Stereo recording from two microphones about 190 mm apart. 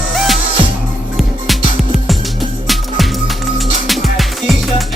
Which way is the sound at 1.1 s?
Centre (ahead or behind).